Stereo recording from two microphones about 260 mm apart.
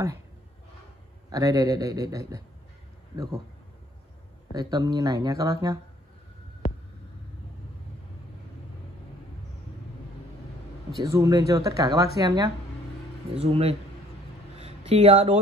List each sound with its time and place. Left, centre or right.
1.3 s speech: centre
4.6 s speech: centre
11.0 s speech: centre
14.6 s a sound: right